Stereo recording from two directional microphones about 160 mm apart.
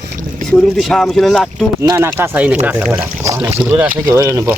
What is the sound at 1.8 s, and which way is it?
Speech, 20° right (ahead or behind).